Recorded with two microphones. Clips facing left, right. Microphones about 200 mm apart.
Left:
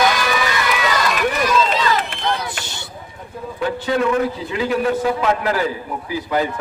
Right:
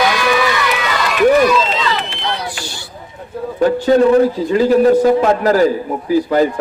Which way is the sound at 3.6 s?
40° right (ahead or behind).